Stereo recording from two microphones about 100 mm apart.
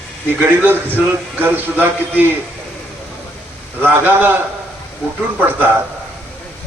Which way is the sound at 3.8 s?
20° right (ahead or behind).